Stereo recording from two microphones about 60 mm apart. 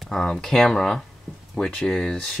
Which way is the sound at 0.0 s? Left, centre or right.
Centre.